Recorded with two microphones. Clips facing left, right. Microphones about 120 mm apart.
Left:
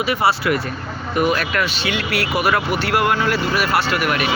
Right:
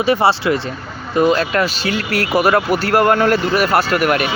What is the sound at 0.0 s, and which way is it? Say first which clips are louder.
Speech: right 4 dB; 30° right (ahead or behind).